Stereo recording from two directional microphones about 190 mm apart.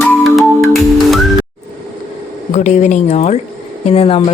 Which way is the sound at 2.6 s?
40° left (ahead or behind).